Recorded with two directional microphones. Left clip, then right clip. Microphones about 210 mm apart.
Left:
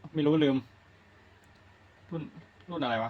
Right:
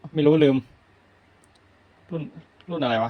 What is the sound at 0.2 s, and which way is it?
Speech, 20° right (ahead or behind).